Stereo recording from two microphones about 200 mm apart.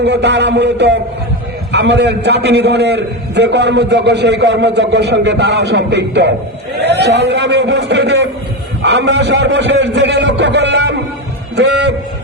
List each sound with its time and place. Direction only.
0.0 s a man's voice: 60° right (ahead or behind)